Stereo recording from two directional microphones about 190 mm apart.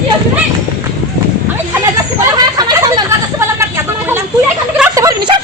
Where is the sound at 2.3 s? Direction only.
20° right (ahead or behind).